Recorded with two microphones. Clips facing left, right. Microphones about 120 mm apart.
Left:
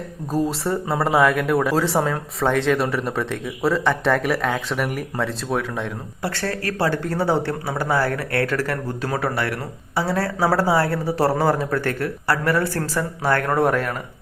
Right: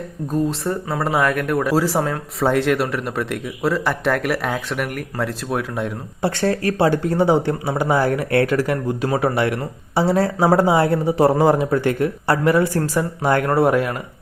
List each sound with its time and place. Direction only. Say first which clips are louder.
0.3 s speech: right 1 dB; 35° left (ahead or behind)
0.6 s a man's voice: left 1 dB; centre (ahead or behind)
6.2 s speech: right 6 dB; 25° right (ahead or behind)